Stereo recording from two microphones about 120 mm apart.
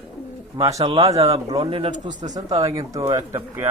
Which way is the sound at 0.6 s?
25° right (ahead or behind).